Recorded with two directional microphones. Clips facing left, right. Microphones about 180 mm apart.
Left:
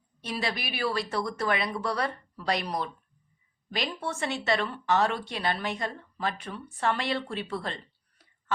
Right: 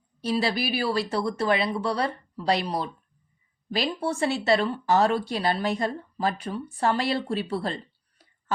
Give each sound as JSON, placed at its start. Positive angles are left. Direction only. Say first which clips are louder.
{"t": 0.2, "sound": "speech", "louder": "right 7 dB", "side_deg": -30}